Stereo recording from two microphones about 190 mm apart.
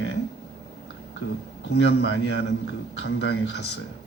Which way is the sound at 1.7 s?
60° left (ahead or behind).